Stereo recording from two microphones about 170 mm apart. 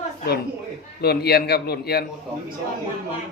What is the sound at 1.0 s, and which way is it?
A man's voice, 70° left (ahead or behind).